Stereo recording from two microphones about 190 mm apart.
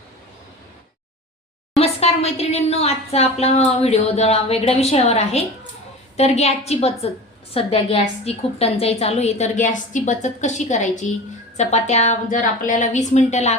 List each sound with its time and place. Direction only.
1.8 s a woman's voice: 35° left (ahead or behind)